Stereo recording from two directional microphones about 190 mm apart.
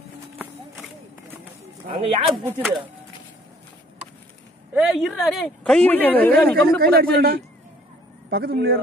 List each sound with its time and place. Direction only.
2.0 s speech: 30° right (ahead or behind)
2.6 s speech: centre (ahead or behind)
4.7 s speech: centre (ahead or behind)
6.8 s speech: 55° right (ahead or behind)